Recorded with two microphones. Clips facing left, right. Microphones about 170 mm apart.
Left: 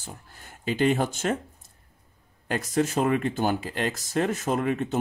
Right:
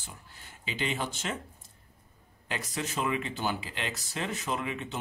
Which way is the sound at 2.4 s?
50° left (ahead or behind).